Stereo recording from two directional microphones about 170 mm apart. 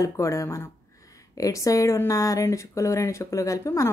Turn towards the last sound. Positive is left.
turn(degrees=15)  # may be behind; listen again after turning